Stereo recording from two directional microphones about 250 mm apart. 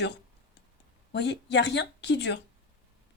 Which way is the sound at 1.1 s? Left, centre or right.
Left.